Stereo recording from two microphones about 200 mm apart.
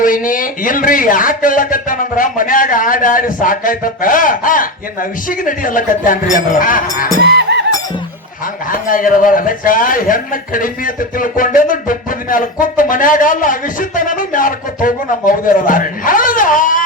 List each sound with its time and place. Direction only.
0.0 s a man's voice: 45° left (ahead or behind)
7.2 s fowl: 60° right (ahead or behind)
8.9 s a man's voice: 45° left (ahead or behind)